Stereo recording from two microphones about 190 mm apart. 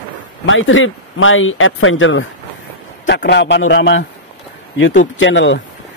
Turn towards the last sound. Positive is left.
turn(degrees=75)  # may be behind; listen again after turning